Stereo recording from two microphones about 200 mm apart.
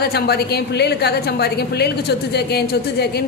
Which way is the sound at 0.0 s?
50° left (ahead or behind).